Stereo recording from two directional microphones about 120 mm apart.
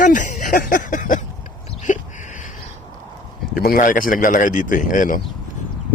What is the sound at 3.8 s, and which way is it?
A man's voice, 90° left.